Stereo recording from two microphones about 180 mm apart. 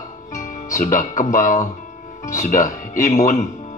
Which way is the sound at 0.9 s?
45° left (ahead or behind).